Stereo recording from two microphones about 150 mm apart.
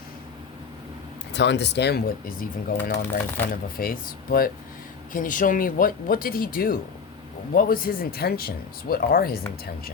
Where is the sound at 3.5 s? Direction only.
75° left (ahead or behind).